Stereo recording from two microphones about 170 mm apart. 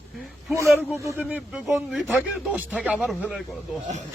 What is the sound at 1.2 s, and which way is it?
Speech, 5° right (ahead or behind).